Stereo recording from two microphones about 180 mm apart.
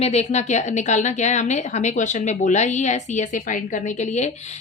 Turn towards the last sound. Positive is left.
turn(degrees=40)  # may be behind; listen again after turning